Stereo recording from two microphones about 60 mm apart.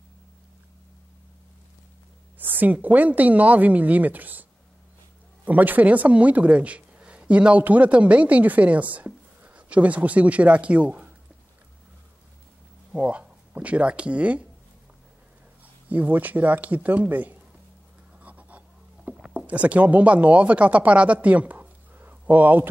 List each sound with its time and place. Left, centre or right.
2.3 s a woman's voice: right
12.9 s speech: right
15.9 s a woman's voice: right
18.2 s a sound: right
19.3 s speech: right